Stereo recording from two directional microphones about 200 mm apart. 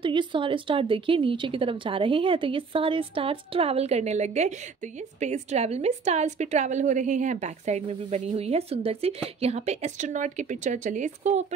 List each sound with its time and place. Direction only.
0.0 s a woman's voice: 25° right (ahead or behind)